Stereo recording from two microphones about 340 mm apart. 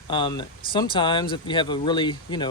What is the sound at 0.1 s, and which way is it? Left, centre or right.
Speech, centre.